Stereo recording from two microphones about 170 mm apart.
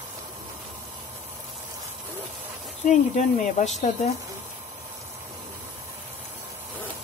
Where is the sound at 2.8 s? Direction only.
45° left (ahead or behind).